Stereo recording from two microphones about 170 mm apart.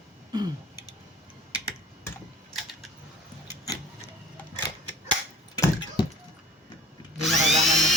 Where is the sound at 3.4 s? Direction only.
20° left (ahead or behind).